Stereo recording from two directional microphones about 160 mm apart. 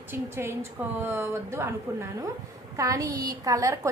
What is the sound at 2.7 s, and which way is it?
A woman's voice, 20° right (ahead or behind).